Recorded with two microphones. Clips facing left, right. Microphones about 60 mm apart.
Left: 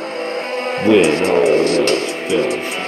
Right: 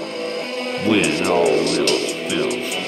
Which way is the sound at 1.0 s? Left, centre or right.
Left.